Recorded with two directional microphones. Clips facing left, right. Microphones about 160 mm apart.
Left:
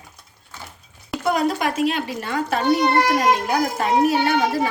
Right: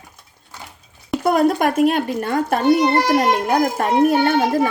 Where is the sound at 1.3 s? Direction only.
50° right (ahead or behind).